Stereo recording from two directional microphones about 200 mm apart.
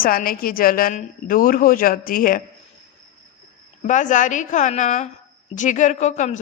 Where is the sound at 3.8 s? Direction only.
40° left (ahead or behind).